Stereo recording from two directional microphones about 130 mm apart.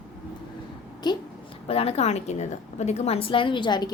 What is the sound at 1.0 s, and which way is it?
Speech, 35° left (ahead or behind).